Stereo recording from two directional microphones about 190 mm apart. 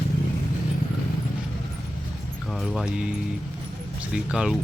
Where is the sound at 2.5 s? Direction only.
Centre (ahead or behind).